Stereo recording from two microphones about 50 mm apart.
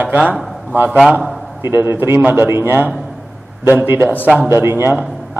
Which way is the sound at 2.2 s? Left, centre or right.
Right.